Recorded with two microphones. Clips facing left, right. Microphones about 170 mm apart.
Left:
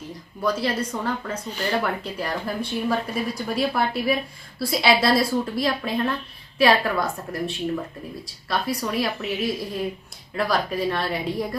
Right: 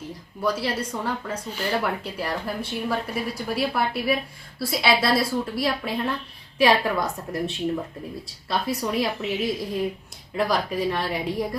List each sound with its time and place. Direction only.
0.4 s a woman's voice: 10° right (ahead or behind)